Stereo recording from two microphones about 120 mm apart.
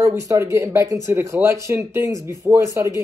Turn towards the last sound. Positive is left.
turn(degrees=-25)  # may be behind; listen again after turning